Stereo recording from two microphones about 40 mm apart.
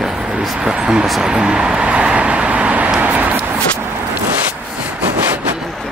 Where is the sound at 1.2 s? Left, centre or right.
Right.